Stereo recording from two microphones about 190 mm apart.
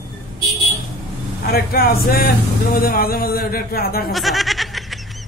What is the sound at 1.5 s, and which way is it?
Speech, 55° left (ahead or behind).